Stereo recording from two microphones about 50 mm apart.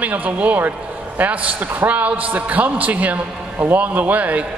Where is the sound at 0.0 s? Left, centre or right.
Right.